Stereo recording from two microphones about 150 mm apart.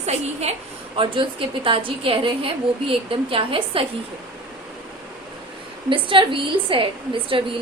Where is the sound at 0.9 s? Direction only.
35° right (ahead or behind).